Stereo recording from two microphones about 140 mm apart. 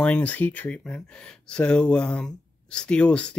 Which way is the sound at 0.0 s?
10° left (ahead or behind).